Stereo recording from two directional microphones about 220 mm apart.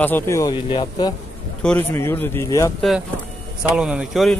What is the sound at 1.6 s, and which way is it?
Speech, 10° left (ahead or behind).